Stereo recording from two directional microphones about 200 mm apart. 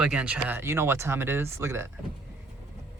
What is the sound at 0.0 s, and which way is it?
Speech, 5° right (ahead or behind).